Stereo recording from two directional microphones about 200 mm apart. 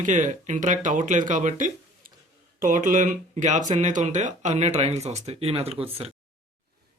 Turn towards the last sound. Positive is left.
turn(degrees=-30)  # may be behind; listen again after turning